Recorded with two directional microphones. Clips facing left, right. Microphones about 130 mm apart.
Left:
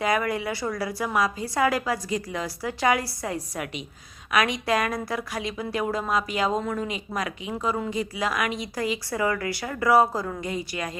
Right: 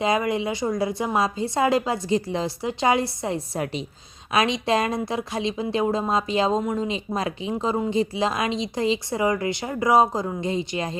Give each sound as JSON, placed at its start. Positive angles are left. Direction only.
{"t": 0.0, "sound": "a woman's voice", "side_deg": -20}